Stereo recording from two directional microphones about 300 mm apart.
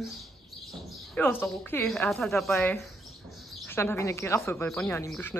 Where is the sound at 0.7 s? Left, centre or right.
Centre.